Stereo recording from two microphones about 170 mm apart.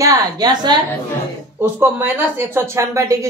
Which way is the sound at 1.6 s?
15° right (ahead or behind).